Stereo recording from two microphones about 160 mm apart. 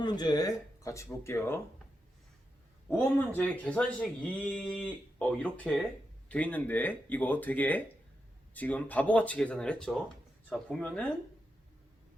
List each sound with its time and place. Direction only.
0.0 s speech: 25° left (ahead or behind)
3.0 s speech: 10° left (ahead or behind)